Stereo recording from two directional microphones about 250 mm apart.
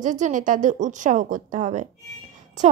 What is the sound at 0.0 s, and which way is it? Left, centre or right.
A woman's voice, right.